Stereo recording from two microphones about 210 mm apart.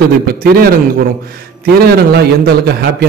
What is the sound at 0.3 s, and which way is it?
Speech, 45° right (ahead or behind).